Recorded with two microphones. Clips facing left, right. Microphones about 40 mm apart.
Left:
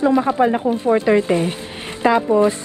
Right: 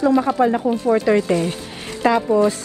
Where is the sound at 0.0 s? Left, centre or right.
Left.